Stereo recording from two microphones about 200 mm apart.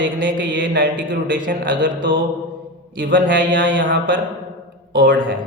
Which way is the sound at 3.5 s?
65° right (ahead or behind).